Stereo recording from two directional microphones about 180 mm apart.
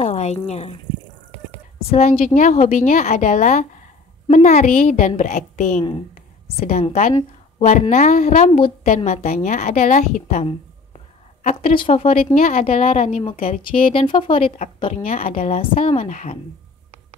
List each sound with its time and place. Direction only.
0.0 s a sound: 40° left (ahead or behind)
0.5 s speech: 35° left (ahead or behind)
1.9 s a woman's voice: 45° left (ahead or behind)
11.4 s speech: 30° left (ahead or behind)